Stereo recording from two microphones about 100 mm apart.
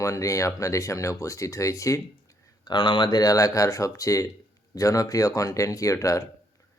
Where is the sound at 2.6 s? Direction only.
55° left (ahead or behind).